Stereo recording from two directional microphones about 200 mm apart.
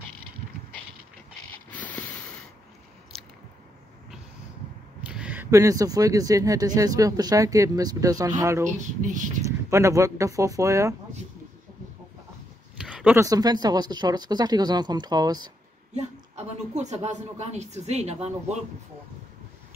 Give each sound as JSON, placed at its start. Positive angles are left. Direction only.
{"t": 1.7, "sound": "mechanisms", "side_deg": 5}
{"t": 5.0, "sound": "speech", "side_deg": -5}
{"t": 8.7, "sound": "speech", "side_deg": -40}
{"t": 9.7, "sound": "speech", "side_deg": -15}
{"t": 12.7, "sound": "speech", "side_deg": -5}
{"t": 15.9, "sound": "speech", "side_deg": -35}